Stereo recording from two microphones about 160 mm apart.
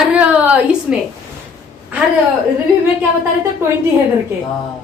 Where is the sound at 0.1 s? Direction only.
5° right (ahead or behind).